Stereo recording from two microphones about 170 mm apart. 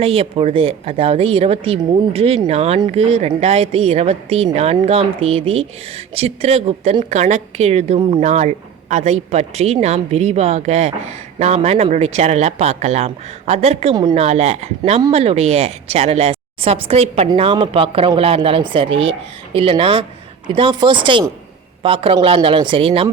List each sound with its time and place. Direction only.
0.0 s a woman's voice: 35° right (ahead or behind)
8.2 s a woman's voice: 45° right (ahead or behind)
13.9 s speech: 25° right (ahead or behind)
14.2 s a woman's voice: 40° right (ahead or behind)